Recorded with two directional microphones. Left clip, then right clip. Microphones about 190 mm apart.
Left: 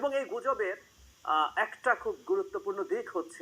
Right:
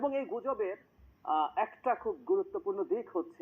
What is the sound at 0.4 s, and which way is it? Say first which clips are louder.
Speech: left 3 dB; 15° left (ahead or behind).